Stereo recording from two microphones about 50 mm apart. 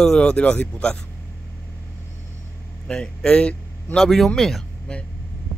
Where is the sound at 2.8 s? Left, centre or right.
Centre.